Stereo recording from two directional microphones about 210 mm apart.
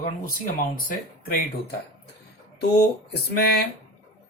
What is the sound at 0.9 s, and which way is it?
Speech, 45° left (ahead or behind).